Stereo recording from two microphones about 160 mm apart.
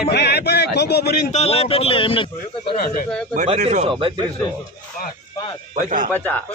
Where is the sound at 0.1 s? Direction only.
90° left.